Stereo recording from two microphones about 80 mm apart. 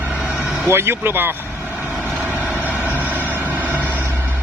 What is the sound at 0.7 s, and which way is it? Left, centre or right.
Speech, right.